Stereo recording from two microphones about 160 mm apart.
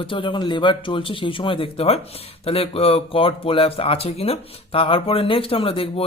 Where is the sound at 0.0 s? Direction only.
30° left (ahead or behind).